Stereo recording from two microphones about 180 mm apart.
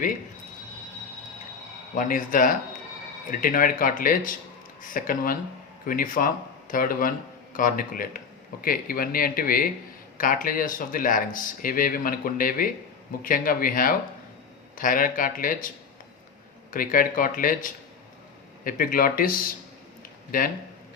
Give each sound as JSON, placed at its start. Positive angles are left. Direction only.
{"t": 2.0, "sound": "speech", "side_deg": 50}
{"t": 16.7, "sound": "speech", "side_deg": 50}
{"t": 20.0, "sound": "a sound", "side_deg": 50}